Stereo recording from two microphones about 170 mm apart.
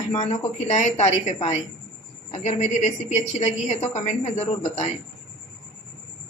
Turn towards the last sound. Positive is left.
turn(degrees=40)  # may be behind; listen again after turning